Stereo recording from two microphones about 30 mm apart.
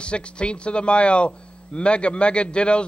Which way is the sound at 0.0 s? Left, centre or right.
Left.